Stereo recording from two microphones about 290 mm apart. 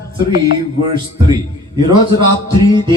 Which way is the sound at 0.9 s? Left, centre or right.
Centre.